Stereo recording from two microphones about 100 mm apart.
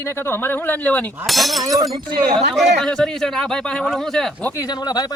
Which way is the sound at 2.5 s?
Centre (ahead or behind).